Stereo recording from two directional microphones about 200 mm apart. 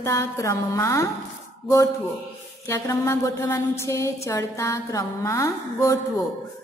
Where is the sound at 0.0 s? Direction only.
15° left (ahead or behind).